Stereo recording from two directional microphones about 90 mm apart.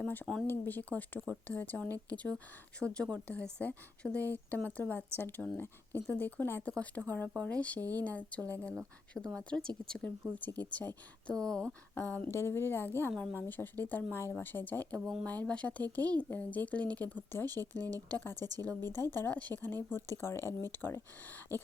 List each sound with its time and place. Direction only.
0.4 s speech: 20° left (ahead or behind)
11.9 s speech: 20° left (ahead or behind)